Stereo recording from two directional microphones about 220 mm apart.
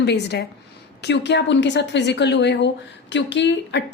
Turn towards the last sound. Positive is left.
turn(degrees=55)  # may be behind; listen again after turning